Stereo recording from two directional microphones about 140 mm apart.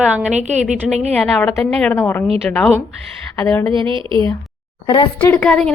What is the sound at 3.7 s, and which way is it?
Speech, 35° right (ahead or behind).